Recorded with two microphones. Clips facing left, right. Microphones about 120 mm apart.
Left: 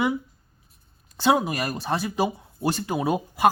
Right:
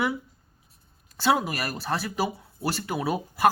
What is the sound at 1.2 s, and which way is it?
A woman's voice, 15° left (ahead or behind).